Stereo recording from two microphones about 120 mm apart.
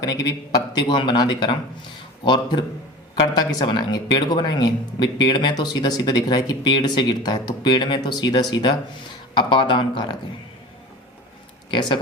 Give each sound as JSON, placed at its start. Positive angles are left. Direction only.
{"t": 0.0, "sound": "speech", "side_deg": 35}
{"t": 11.7, "sound": "speech", "side_deg": 40}